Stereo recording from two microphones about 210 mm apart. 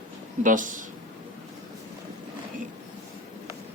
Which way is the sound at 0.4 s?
40° right (ahead or behind).